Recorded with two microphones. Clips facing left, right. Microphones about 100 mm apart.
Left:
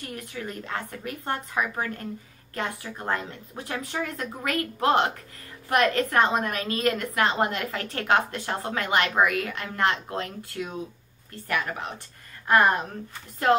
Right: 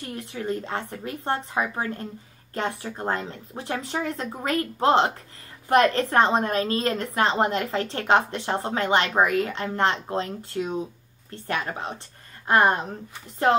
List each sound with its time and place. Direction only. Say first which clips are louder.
0.0 s a woman's voice: right 3 dB; 25° right (ahead or behind)